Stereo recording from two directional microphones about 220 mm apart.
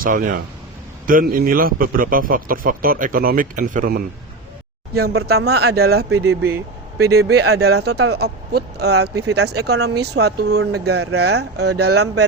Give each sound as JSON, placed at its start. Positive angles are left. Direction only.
{"t": 0.0, "sound": "a man's voice", "side_deg": -35}
{"t": 6.1, "sound": "speech", "side_deg": -10}
{"t": 7.0, "sound": "speech", "side_deg": -45}